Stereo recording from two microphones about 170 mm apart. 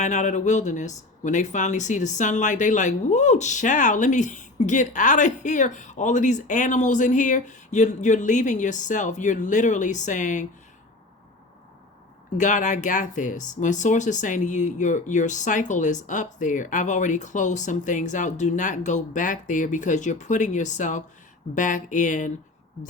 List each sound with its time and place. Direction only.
0.0 s speech: 45° left (ahead or behind)
12.4 s speech: 45° left (ahead or behind)